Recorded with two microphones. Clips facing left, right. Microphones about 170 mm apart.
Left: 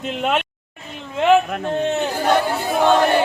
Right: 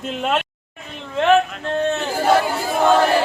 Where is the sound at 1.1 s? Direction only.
15° left (ahead or behind).